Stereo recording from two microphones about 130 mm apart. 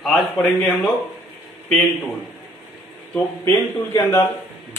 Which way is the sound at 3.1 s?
15° left (ahead or behind).